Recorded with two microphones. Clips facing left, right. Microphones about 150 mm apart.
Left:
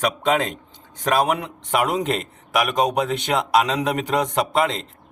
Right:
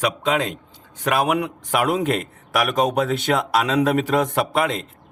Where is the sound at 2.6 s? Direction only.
20° left (ahead or behind).